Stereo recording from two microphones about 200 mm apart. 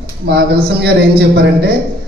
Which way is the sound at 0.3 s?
55° right (ahead or behind).